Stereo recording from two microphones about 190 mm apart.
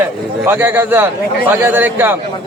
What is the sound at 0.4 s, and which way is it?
A man's voice, 10° right (ahead or behind).